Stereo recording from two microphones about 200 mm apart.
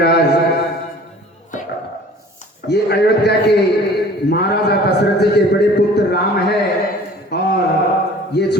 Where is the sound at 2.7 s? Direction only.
55° left (ahead or behind).